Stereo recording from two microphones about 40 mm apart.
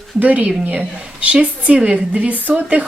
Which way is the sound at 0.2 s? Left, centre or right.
Right.